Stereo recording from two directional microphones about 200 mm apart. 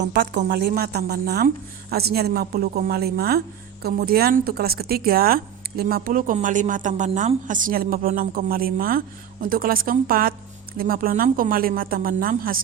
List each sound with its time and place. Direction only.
0.0 s speech: 60° right (ahead or behind)